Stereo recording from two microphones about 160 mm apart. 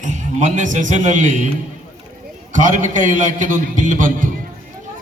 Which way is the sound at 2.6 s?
55° right (ahead or behind).